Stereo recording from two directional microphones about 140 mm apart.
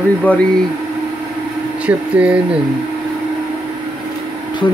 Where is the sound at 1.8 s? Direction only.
10° right (ahead or behind).